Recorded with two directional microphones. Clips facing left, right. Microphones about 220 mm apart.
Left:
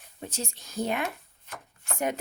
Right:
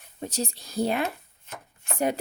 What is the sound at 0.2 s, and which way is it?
A woman's voice, 40° right (ahead or behind).